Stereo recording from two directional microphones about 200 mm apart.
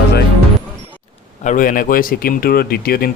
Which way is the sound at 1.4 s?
40° left (ahead or behind).